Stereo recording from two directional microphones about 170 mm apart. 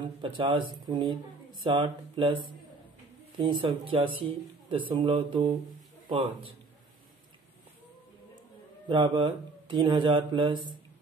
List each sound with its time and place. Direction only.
0.0 s speech: 30° right (ahead or behind)
8.8 s speech: 30° right (ahead or behind)